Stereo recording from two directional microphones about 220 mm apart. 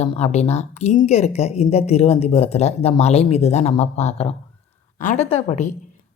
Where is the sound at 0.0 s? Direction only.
30° left (ahead or behind).